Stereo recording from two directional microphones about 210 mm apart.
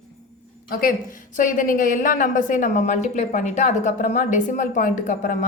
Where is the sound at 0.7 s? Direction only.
45° left (ahead or behind).